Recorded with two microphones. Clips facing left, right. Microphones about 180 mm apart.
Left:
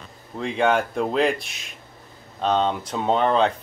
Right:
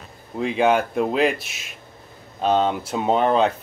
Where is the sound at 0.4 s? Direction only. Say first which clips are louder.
Right 2 dB; 5° right (ahead or behind).